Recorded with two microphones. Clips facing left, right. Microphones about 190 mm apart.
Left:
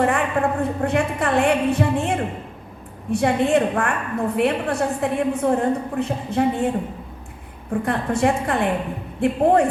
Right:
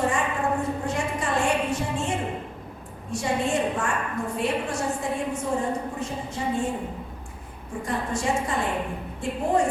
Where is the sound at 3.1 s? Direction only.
60° left (ahead or behind).